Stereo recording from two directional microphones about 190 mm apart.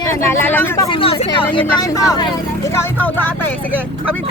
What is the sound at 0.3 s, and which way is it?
Speech, 10° left (ahead or behind).